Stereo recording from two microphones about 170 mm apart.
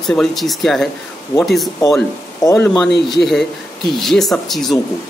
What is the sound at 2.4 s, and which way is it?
Speech, 10° left (ahead or behind).